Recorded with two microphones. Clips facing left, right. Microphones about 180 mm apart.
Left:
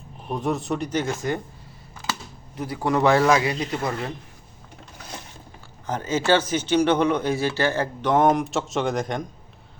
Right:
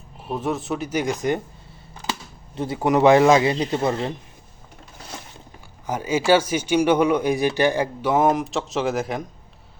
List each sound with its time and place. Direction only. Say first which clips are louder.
0.3 s speech: even; centre (ahead or behind)
2.6 s speech: right 4 dB; 25° right (ahead or behind)
5.8 s speech: right 2 dB; 10° right (ahead or behind)